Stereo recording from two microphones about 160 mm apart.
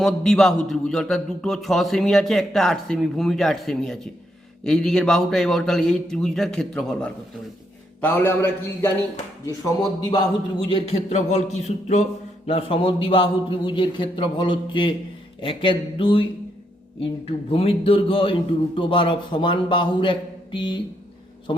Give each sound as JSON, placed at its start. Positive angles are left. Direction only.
{"t": 0.0, "sound": "a man's voice", "side_deg": 0}
{"t": 10.0, "sound": "a man's voice", "side_deg": 25}
{"t": 10.7, "sound": "a man's voice", "side_deg": 35}
{"t": 17.2, "sound": "a man's voice", "side_deg": 40}